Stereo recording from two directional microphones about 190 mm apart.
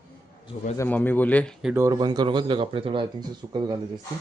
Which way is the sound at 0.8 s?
10° left (ahead or behind).